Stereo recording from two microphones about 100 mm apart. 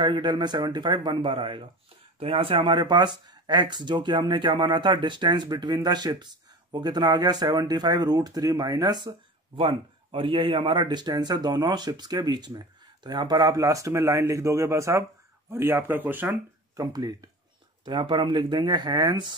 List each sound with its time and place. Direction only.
0.0 s speech: 50° right (ahead or behind)
9.6 s a man's voice: 55° right (ahead or behind); by 16.3 s 20° right (ahead or behind)
16.7 s a man's voice: 35° right (ahead or behind)
17.8 s speech: 55° right (ahead or behind)